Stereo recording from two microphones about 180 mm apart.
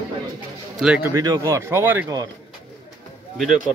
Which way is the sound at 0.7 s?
5° right (ahead or behind).